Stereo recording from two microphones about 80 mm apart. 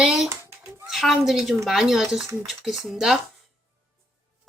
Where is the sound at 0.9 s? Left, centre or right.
Centre.